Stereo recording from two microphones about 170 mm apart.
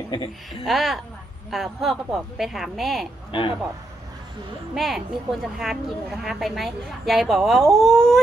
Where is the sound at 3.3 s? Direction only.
30° left (ahead or behind).